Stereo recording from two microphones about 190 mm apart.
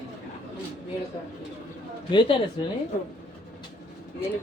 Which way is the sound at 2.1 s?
25° left (ahead or behind).